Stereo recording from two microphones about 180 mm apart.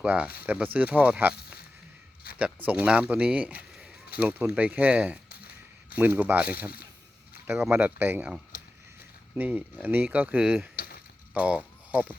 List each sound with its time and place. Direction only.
0.0 s speech: 5° right (ahead or behind)
2.3 s a sound: 55° left (ahead or behind)
2.6 s speech: 5° right (ahead or behind)
7.6 s speech: 10° right (ahead or behind)
10.8 s mechanisms: 55° left (ahead or behind)
11.3 s speech: 5° right (ahead or behind)